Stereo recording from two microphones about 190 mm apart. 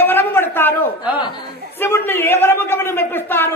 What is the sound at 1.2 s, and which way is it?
Speech, 25° left (ahead or behind).